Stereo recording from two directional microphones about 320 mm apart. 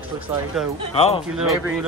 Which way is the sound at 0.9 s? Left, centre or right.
Centre.